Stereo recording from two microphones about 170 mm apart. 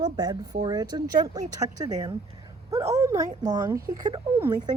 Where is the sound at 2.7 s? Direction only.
20° right (ahead or behind).